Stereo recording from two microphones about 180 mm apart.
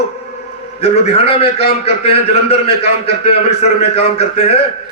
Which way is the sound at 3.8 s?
35° left (ahead or behind).